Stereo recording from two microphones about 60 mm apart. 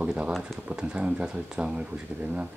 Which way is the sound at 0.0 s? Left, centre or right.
Centre.